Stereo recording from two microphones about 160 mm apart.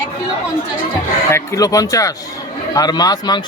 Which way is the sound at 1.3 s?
20° left (ahead or behind).